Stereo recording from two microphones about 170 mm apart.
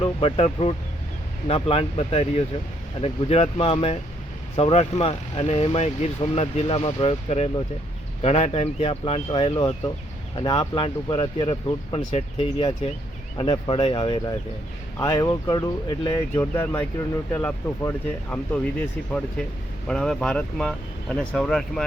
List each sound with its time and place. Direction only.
0.0 s speech: 35° left (ahead or behind)
14.9 s speech: 20° left (ahead or behind)
19.9 s speech: 5° left (ahead or behind)